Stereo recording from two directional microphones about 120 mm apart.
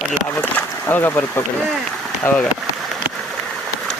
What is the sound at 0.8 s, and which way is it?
Speech, 15° left (ahead or behind).